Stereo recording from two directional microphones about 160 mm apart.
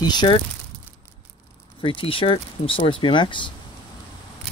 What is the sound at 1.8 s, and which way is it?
Speech, 35° left (ahead or behind).